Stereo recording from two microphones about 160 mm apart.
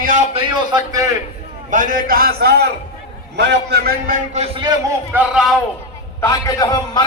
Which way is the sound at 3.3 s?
90° right.